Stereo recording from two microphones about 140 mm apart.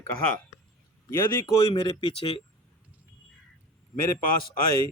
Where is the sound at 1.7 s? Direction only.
40° left (ahead or behind).